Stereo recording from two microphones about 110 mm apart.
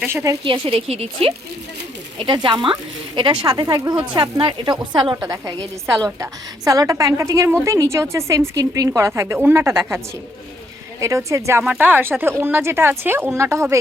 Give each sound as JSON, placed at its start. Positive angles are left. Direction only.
{"t": 0.1, "sound": "a woman's voice", "side_deg": -25}
{"t": 0.4, "sound": "a woman's voice", "side_deg": -50}
{"t": 2.1, "sound": "a woman's voice", "side_deg": -45}
{"t": 11.0, "sound": "a woman's voice", "side_deg": -30}
{"t": 11.6, "sound": "a woman's voice", "side_deg": -15}